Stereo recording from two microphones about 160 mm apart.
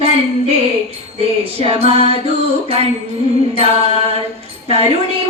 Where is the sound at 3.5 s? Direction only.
40° right (ahead or behind).